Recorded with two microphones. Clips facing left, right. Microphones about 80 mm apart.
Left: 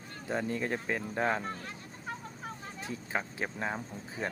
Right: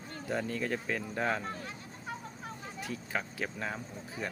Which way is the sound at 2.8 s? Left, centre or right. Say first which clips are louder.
Left 1 dB; left.